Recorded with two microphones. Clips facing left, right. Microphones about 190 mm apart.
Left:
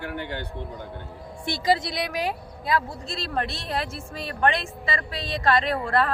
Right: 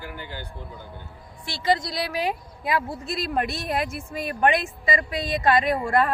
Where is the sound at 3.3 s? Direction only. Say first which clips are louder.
Right 2 dB; 15° right (ahead or behind).